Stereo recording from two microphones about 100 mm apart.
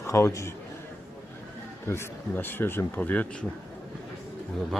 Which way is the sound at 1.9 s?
25° left (ahead or behind).